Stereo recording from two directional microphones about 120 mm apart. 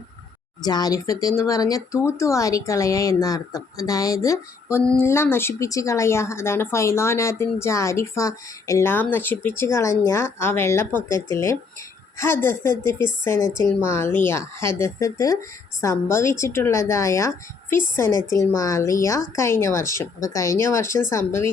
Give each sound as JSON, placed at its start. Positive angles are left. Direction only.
{"t": 0.6, "sound": "speech", "side_deg": 35}